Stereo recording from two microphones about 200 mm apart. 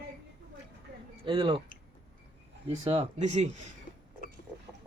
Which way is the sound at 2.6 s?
30° right (ahead or behind).